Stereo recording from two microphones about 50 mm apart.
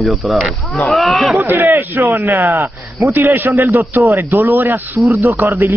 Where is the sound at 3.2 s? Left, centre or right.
Right.